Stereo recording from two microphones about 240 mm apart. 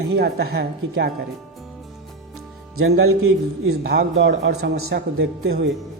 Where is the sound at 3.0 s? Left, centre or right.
Right.